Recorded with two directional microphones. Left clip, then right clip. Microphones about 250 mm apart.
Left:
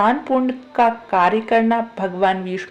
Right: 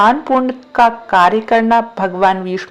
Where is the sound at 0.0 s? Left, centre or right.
Centre.